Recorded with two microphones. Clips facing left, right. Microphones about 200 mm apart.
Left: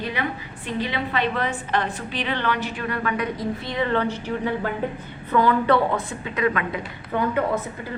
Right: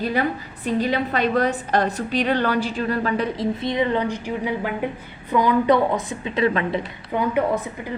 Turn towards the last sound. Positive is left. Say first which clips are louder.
# right 2 dB
turn(degrees=-15)  # may be behind; listen again after turning